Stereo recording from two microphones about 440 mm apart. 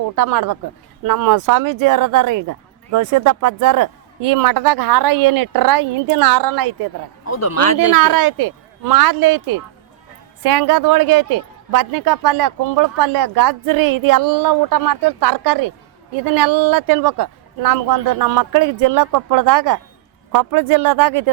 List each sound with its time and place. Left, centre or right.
0.2 s speech: right
7.3 s speech: left
7.9 s speech: right
10.4 s speech: right